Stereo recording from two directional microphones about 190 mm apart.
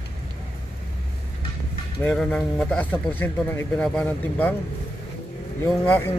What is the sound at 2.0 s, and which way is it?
Speech, 5° left (ahead or behind).